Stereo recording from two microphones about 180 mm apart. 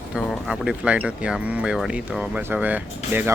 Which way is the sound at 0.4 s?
5° right (ahead or behind).